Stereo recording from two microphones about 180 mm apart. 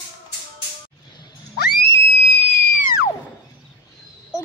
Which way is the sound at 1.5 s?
65° left (ahead or behind).